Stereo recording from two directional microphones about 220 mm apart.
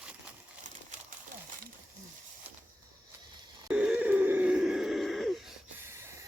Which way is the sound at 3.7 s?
5° right (ahead or behind).